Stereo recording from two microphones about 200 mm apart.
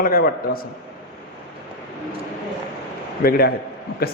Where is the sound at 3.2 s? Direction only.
50° left (ahead or behind).